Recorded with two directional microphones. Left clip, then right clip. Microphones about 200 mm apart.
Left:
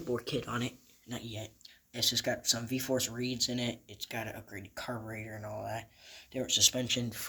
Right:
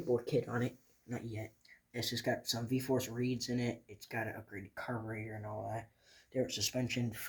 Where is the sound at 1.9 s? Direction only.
5° left (ahead or behind).